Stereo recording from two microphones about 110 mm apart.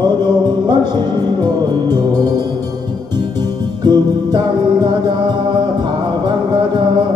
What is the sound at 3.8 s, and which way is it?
Music, 40° right (ahead or behind).